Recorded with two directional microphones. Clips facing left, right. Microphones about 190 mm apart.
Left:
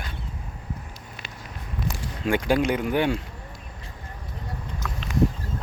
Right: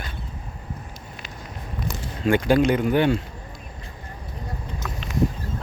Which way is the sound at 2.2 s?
10° left (ahead or behind).